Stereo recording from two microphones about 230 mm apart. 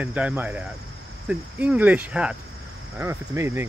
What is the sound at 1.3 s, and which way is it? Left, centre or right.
Cricket, centre.